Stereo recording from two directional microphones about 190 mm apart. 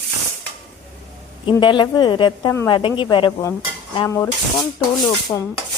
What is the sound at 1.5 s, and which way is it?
Speech, 25° left (ahead or behind).